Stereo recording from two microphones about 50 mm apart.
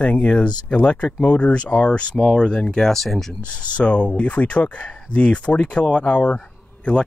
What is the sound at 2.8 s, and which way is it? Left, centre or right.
Speech, centre.